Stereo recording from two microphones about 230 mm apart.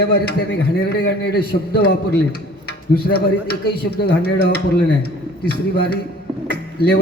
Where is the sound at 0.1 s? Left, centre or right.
Left.